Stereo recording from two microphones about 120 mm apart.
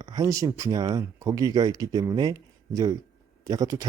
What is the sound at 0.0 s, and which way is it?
Speech, 30° right (ahead or behind).